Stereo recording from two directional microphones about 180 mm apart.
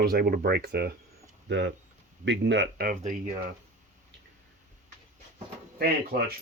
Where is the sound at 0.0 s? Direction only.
60° right (ahead or behind).